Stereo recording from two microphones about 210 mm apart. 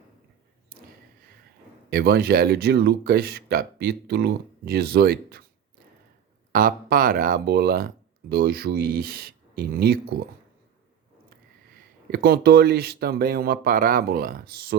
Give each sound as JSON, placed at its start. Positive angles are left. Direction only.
{"t": 1.9, "sound": "speech", "side_deg": -45}
{"t": 6.5, "sound": "speech", "side_deg": -45}
{"t": 12.1, "sound": "speech", "side_deg": -50}